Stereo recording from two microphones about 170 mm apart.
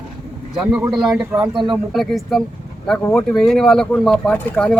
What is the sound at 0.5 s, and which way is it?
Speech, 5° right (ahead or behind).